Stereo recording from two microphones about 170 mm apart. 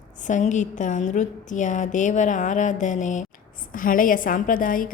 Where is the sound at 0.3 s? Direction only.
45° left (ahead or behind).